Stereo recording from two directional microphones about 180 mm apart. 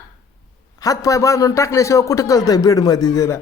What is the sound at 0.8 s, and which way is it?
A man's voice, 20° left (ahead or behind).